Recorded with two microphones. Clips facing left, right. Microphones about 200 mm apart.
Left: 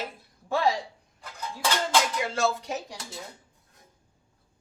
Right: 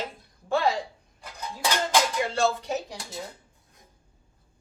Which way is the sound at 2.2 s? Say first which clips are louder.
Right 2 dB; centre (ahead or behind).